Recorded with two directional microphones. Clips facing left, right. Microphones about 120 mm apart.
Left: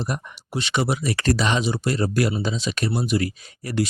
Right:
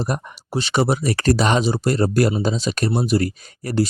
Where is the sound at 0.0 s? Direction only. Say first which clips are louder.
Right 4 dB; 35° right (ahead or behind).